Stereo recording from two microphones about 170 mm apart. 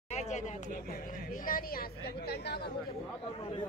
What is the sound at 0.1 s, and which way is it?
Speech, 40° left (ahead or behind).